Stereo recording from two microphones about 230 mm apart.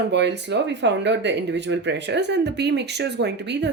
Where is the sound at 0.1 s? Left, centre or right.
Right.